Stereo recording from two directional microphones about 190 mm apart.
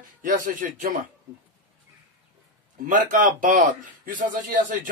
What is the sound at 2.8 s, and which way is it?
A man's voice, 45° right (ahead or behind).